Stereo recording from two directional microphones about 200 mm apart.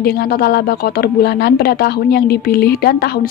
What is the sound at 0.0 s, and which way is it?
A woman's voice, 50° left (ahead or behind).